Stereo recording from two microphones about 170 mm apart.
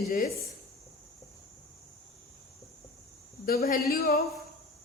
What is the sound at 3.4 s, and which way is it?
Speech, 55° left (ahead or behind).